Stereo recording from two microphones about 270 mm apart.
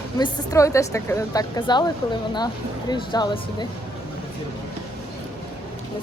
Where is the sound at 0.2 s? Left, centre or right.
Centre.